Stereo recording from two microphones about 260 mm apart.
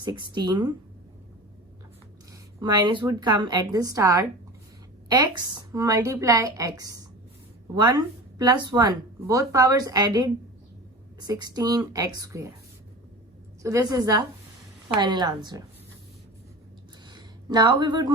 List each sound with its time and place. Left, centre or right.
0.0 s speech: centre
2.6 s speech: centre
13.6 s a woman's voice: centre
17.1 s a sound: centre